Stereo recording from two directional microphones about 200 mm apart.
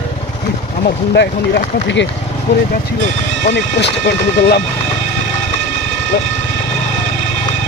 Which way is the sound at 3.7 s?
60° left (ahead or behind).